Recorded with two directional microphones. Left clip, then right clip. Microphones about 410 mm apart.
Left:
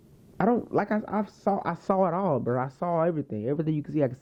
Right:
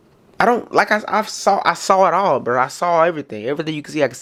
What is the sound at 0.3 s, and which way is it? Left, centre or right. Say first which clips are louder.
Speech: right 11 dB; centre.